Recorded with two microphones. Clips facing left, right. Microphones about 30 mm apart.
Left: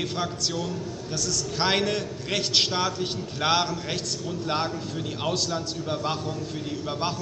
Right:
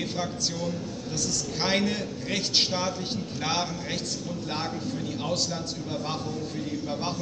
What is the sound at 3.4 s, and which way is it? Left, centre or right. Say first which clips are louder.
Speech: left 6 dB; left.